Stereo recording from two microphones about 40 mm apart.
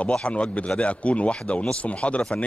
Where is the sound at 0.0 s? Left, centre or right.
Left.